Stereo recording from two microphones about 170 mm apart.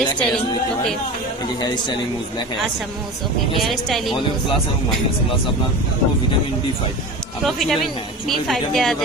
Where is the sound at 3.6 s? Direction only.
Centre (ahead or behind).